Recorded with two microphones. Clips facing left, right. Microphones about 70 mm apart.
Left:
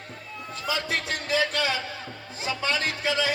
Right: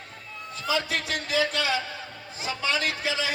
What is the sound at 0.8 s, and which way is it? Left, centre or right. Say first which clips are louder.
A man's voice: even; left.